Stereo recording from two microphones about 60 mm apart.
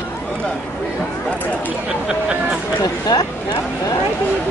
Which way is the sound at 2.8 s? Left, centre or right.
Left.